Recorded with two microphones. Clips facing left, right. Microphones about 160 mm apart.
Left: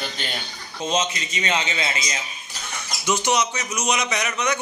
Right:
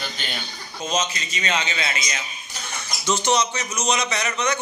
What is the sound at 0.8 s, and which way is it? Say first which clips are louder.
Speech: left 1 dB; 30° left (ahead or behind).